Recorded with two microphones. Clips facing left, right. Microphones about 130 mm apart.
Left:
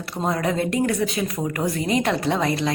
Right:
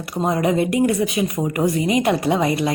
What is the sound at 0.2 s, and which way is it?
A woman's voice, 20° right (ahead or behind).